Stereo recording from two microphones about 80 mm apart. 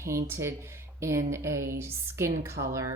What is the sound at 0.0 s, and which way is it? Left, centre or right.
A woman's voice, right.